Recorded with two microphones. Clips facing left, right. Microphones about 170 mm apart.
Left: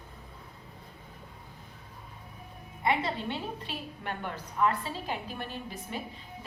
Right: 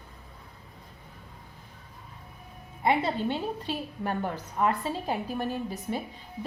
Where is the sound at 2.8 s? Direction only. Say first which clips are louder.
Right 4 dB; 35° right (ahead or behind).